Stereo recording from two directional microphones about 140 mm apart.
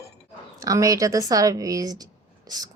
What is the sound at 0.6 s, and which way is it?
A woman's voice, 25° right (ahead or behind).